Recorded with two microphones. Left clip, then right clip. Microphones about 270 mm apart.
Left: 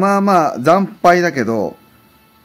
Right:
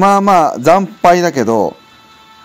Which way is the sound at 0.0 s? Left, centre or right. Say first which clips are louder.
Right 4 dB; centre.